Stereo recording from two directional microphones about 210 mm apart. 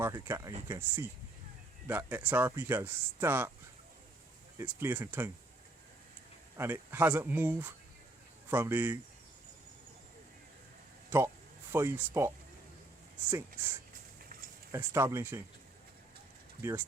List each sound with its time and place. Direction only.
0.0 s speech: 15° right (ahead or behind)
4.5 s speech: 10° right (ahead or behind)
6.6 s speech: 10° right (ahead or behind)
11.1 s speech: 10° right (ahead or behind)
14.7 s speech: 10° right (ahead or behind)
16.6 s speech: 10° right (ahead or behind)